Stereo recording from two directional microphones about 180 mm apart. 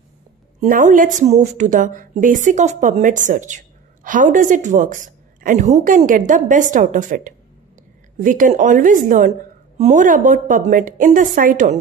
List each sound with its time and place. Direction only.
0.6 s a woman's voice: 45° right (ahead or behind)